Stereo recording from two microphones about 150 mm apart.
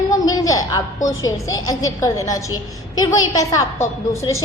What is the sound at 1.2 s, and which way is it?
A woman's voice, 25° left (ahead or behind).